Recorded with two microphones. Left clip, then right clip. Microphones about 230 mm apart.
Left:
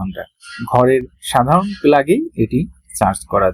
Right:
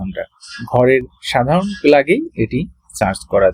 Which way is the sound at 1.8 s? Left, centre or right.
Left.